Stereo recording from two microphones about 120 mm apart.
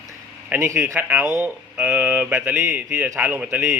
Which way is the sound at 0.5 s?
15° right (ahead or behind).